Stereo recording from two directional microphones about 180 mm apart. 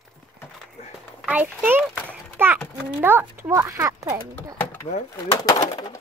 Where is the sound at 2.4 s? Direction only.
10° right (ahead or behind).